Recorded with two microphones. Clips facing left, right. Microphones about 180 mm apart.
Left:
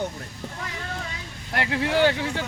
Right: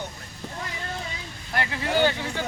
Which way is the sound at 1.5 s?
75° left (ahead or behind).